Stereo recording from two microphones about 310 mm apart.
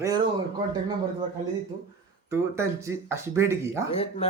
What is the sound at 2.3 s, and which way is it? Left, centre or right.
Speech, centre.